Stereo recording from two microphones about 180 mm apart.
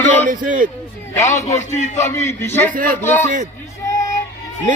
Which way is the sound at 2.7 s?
50° right (ahead or behind).